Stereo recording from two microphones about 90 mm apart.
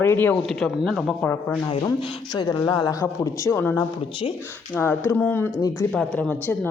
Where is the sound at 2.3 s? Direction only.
55° left (ahead or behind).